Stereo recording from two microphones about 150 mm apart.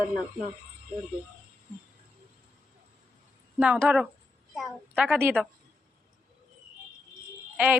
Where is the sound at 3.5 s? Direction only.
10° right (ahead or behind).